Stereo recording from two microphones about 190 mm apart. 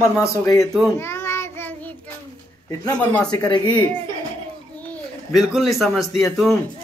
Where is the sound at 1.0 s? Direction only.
15° left (ahead or behind).